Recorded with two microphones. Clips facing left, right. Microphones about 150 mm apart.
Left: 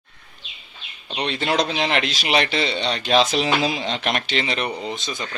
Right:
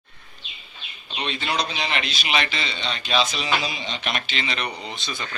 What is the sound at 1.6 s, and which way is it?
Speech, 85° left.